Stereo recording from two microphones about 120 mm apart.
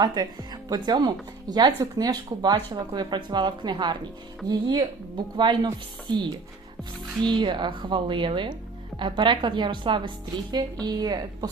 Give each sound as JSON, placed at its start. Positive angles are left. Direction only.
{"t": 0.0, "sound": "a woman's voice", "side_deg": -35}